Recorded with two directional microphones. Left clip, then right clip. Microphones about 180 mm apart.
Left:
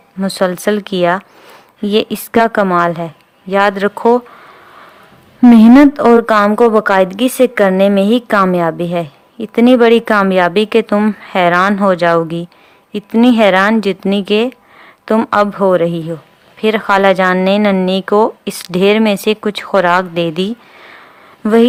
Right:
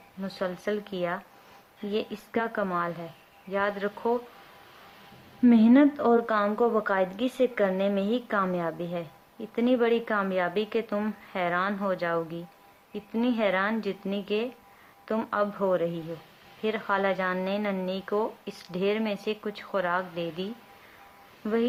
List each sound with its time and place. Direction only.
0.2 s speech: 45° left (ahead or behind)
5.5 s a woman's voice: 40° left (ahead or behind)